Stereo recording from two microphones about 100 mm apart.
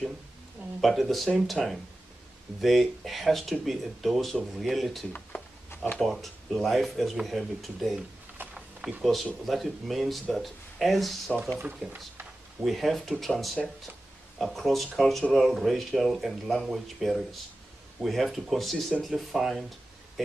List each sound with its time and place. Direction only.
0.7 s speech: centre (ahead or behind)
5.1 s a sound: 20° left (ahead or behind)
5.9 s speech: centre (ahead or behind)
8.4 s speech: 15° right (ahead or behind); by 12.0 s 10° left (ahead or behind)
12.6 s speech: centre (ahead or behind)